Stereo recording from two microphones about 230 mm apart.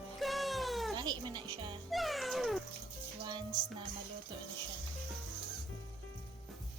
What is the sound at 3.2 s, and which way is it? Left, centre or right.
Speech, centre.